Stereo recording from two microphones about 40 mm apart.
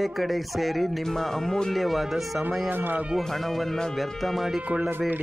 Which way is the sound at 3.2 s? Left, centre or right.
Centre.